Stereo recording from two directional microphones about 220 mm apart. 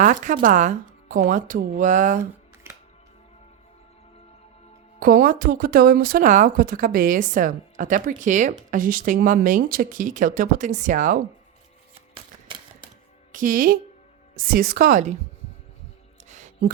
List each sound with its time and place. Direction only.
0.0 s speech: 35° right (ahead or behind)
4.9 s speech: 40° right (ahead or behind)
12.1 s typewriter: 20° right (ahead or behind)
13.3 s a woman's voice: 40° right (ahead or behind)
16.3 s a sound: 35° right (ahead or behind)